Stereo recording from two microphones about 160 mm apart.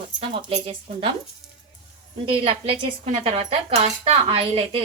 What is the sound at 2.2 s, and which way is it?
A woman's voice, 35° right (ahead or behind).